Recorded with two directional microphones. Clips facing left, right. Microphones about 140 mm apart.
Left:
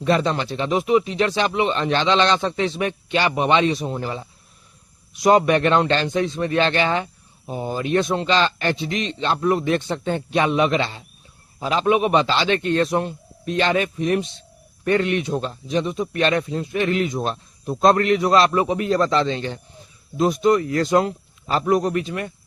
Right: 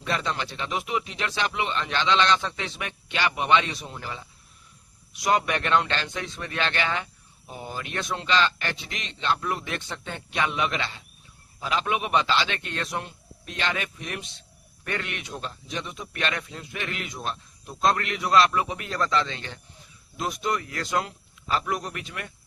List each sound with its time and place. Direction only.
0.0 s a man's voice: 35° left (ahead or behind)